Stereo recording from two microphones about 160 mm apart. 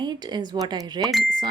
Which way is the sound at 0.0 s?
25° right (ahead or behind).